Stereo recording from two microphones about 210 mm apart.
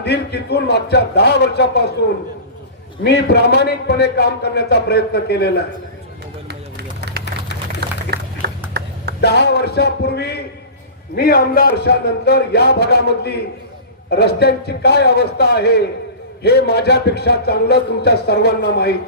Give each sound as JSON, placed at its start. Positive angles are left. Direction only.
{"t": 0.0, "sound": "a man's voice", "side_deg": 50}
{"t": 3.0, "sound": "a man's voice", "side_deg": 50}
{"t": 6.5, "sound": "a sound", "side_deg": -50}
{"t": 9.2, "sound": "a man's voice", "side_deg": 50}